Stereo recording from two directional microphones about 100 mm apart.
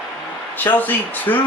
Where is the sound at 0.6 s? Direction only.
15° left (ahead or behind).